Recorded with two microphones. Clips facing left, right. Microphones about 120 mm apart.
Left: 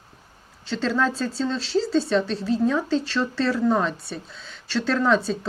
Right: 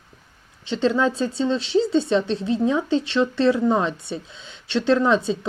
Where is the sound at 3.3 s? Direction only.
20° right (ahead or behind).